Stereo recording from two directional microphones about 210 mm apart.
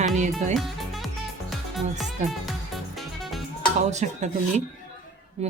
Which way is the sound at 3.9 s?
35° right (ahead or behind).